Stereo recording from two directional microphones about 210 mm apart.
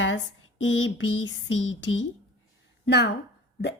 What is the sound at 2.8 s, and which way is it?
Speech, 50° left (ahead or behind).